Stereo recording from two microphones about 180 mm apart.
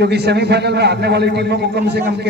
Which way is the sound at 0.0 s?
70° right (ahead or behind).